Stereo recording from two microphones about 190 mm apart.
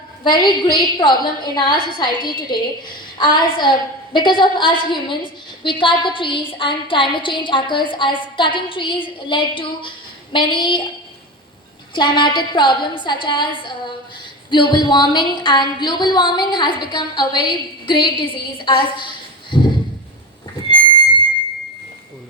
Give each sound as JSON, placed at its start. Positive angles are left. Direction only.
{"t": 0.3, "sound": "a woman's voice", "side_deg": 25}
{"t": 11.9, "sound": "a woman's voice", "side_deg": 25}